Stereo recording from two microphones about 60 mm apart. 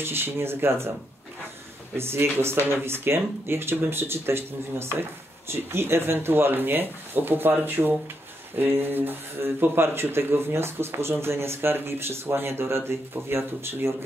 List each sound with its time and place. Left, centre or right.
0.0 s speech: right
2.0 s speech: right